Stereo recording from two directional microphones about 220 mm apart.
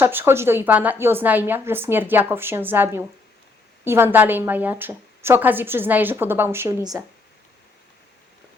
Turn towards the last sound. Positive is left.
turn(degrees=-15)  # may be behind; listen again after turning